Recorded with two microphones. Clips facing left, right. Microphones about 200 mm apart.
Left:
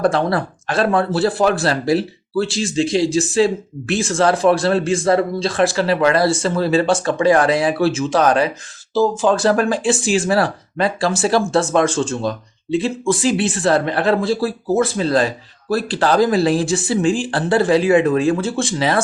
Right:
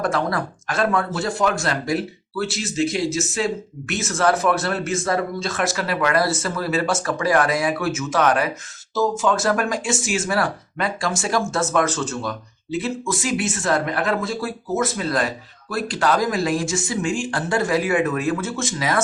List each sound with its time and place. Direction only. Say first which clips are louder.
0.0 s speech: left 5 dB; 30° left (ahead or behind)